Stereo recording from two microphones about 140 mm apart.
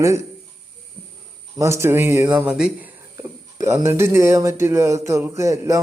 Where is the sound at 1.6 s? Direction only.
20° right (ahead or behind).